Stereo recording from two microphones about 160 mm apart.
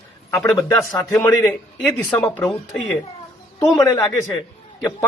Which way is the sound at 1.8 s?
5° left (ahead or behind).